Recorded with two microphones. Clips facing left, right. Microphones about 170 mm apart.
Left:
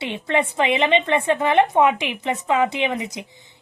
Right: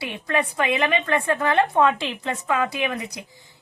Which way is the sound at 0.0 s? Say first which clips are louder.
Left 3 dB; 25° left (ahead or behind).